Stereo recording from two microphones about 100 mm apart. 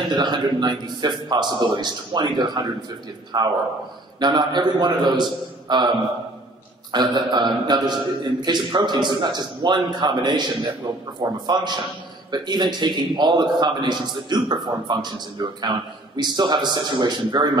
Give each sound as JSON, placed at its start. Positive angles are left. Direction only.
{"t": 0.1, "sound": "a man's voice", "side_deg": -50}
{"t": 6.9, "sound": "a man's voice", "side_deg": -45}